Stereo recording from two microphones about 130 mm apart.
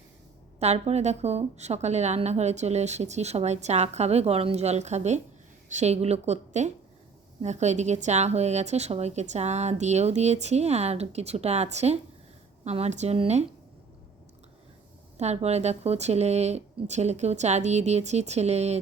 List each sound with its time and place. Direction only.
0.6 s a woman's voice: 55° right (ahead or behind)
15.2 s a woman's voice: 55° right (ahead or behind)